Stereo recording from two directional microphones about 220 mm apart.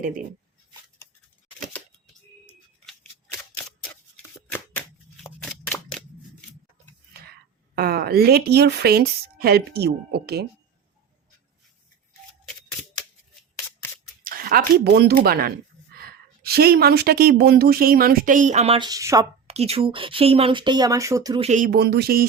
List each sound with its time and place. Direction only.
1.5 s a sound: centre (ahead or behind)
4.5 s shuffling cards: 10° left (ahead or behind)
7.8 s a woman's voice: 45° right (ahead or behind)
14.3 s a sound: 40° right (ahead or behind)
14.9 s a woman's voice: 45° right (ahead or behind); by 19.3 s 15° right (ahead or behind)
19.5 s speech: 30° right (ahead or behind)
21.4 s speech: 35° right (ahead or behind)
21.7 s a woman's voice: 50° right (ahead or behind)